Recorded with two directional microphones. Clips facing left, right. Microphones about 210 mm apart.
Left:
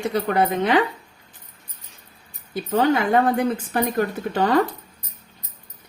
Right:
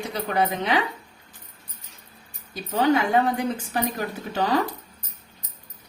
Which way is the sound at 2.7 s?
55° left (ahead or behind).